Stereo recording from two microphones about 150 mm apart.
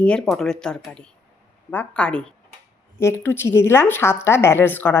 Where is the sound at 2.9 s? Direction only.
15° left (ahead or behind).